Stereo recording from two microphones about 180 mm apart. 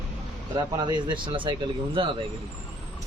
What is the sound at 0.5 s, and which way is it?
Speech, 25° right (ahead or behind).